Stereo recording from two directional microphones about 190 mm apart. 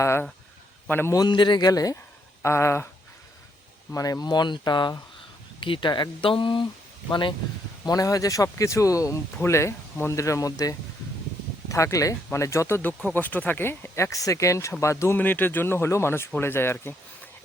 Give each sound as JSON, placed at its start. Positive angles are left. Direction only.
{"t": 0.0, "sound": "a man's voice", "side_deg": 15}
{"t": 3.9, "sound": "a man's voice", "side_deg": 20}